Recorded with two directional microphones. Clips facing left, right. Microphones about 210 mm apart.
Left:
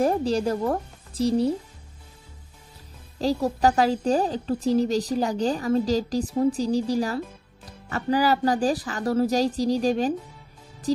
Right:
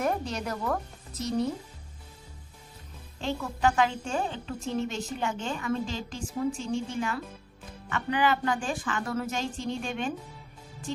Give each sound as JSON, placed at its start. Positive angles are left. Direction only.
{"t": 0.0, "sound": "speech", "side_deg": 30}
{"t": 3.2, "sound": "a woman's voice", "side_deg": 35}